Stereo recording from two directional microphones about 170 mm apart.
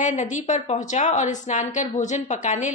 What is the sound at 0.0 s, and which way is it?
A woman's voice, 45° left (ahead or behind).